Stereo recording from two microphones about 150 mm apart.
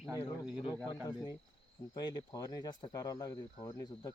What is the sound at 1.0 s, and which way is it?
Speech, 25° left (ahead or behind).